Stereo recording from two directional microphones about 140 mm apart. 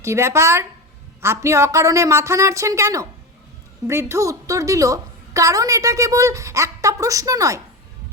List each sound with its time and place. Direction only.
0.0 s a woman's voice: 20° right (ahead or behind)